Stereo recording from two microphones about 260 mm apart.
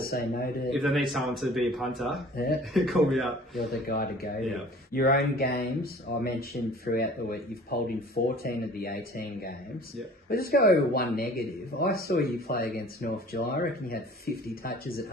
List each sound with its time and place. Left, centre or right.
0.0 s a man's voice: left
0.7 s a man's voice: centre
2.3 s a man's voice: left
2.7 s a man's voice: centre
3.8 s a man's voice: left